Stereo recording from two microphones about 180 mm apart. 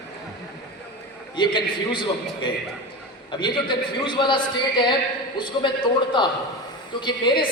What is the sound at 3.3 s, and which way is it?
A man's voice, 25° left (ahead or behind).